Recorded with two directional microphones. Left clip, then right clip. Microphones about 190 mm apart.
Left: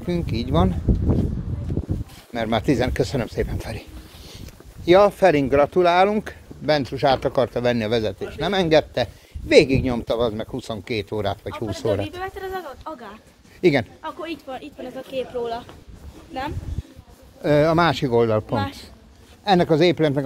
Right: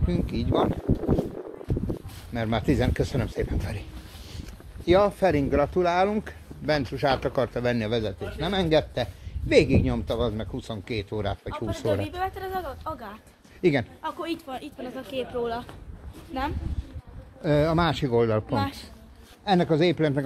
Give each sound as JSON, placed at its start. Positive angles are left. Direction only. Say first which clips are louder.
{"t": 0.0, "sound": "speech", "louder": "left 4 dB", "side_deg": 45}
{"t": 2.3, "sound": "speech", "louder": "left 5 dB", "side_deg": 35}
{"t": 4.8, "sound": "speech", "louder": "left 6 dB", "side_deg": 50}
{"t": 6.6, "sound": "speech", "louder": "left 5 dB", "side_deg": 25}
{"t": 12.2, "sound": "speech", "louder": "even", "side_deg": -40}
{"t": 13.6, "sound": "speech", "louder": "left 5 dB", "side_deg": 35}
{"t": 14.0, "sound": "speech", "louder": "left 1 dB", "side_deg": -45}
{"t": 15.1, "sound": "speech", "louder": "left 3 dB", "side_deg": -30}
{"t": 17.4, "sound": "speech", "louder": "left 6 dB", "side_deg": 50}
{"t": 18.0, "sound": "speech", "louder": "left 4 dB", "side_deg": 25}
{"t": 19.4, "sound": "speech", "louder": "left 5 dB", "side_deg": 40}